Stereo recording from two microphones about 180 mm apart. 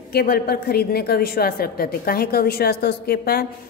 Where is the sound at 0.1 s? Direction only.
60° left (ahead or behind).